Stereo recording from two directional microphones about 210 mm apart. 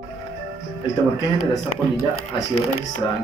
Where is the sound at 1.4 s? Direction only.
90° left.